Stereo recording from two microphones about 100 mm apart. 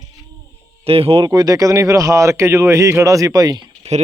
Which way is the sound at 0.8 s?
75° right (ahead or behind).